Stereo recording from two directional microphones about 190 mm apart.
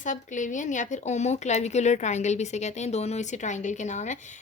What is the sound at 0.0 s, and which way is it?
Speech, 40° left (ahead or behind).